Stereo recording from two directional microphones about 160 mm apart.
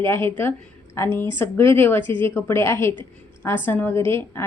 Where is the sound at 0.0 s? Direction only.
15° left (ahead or behind).